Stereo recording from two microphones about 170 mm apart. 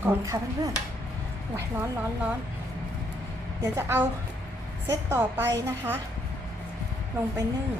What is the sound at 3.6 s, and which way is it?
A woman's voice, 15° right (ahead or behind).